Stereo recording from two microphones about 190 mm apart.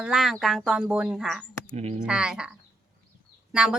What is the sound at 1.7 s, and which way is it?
Speech, 35° right (ahead or behind).